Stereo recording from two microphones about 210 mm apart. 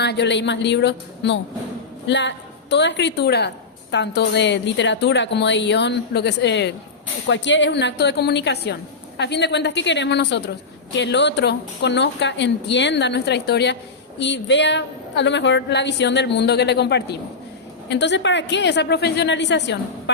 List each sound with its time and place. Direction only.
0.0 s a woman's voice: 55° left (ahead or behind)